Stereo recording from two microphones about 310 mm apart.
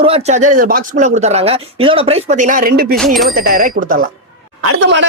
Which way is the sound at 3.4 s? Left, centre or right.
Right.